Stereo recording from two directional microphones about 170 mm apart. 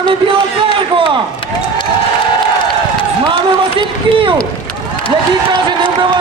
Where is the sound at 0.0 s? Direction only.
30° right (ahead or behind).